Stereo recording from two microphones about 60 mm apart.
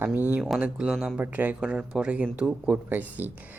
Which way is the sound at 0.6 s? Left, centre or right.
Centre.